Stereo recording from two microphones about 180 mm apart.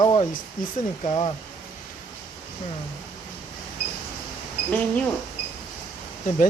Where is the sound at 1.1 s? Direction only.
35° left (ahead or behind).